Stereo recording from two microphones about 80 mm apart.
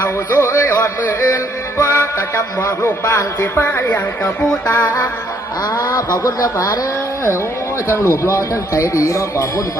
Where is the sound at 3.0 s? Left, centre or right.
Left.